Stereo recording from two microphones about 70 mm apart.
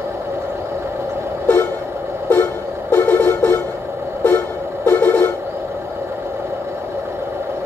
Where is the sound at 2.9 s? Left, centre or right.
Left.